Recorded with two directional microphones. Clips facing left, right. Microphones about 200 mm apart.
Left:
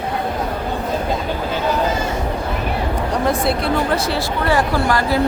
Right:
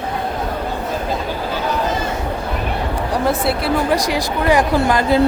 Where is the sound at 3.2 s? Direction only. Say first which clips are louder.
Even; 5° right (ahead or behind).